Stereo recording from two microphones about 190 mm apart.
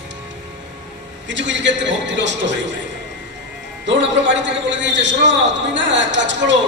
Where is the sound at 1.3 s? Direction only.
70° right (ahead or behind).